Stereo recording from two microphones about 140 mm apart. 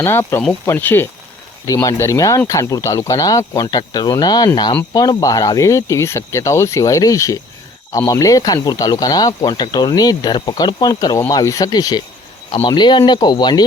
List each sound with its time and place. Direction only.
0.0 s speech: 15° left (ahead or behind)
1.6 s speech: 25° left (ahead or behind)